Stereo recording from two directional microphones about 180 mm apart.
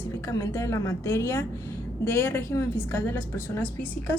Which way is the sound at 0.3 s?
15° left (ahead or behind).